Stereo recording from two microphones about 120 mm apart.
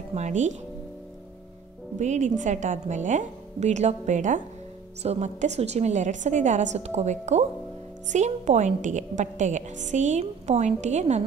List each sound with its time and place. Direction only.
0.1 s a woman's voice: 75° right (ahead or behind)
2.0 s a woman's voice: 80° right
5.0 s a woman's voice: 70° right (ahead or behind)